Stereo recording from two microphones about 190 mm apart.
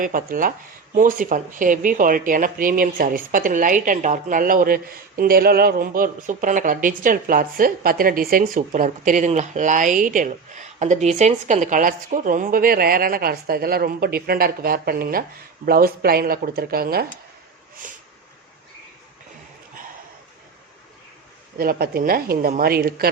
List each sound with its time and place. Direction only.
0.0 s speech: 45° right (ahead or behind)
21.6 s speech: 50° right (ahead or behind)